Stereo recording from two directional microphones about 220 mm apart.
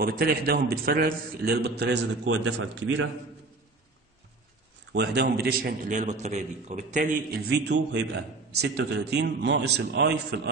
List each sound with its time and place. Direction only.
0.0 s a man's voice: 40° right (ahead or behind); by 3.1 s 60° right (ahead or behind)
4.9 s a man's voice: 50° right (ahead or behind)
7.5 s a man's voice: 50° right (ahead or behind)